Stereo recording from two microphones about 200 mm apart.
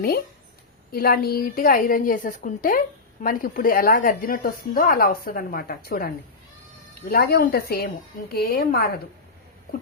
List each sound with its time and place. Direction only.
0.9 s speech: 50° left (ahead or behind)
7.1 s speech: 55° left (ahead or behind)